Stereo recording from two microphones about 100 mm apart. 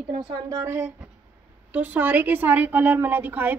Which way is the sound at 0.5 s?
30° right (ahead or behind).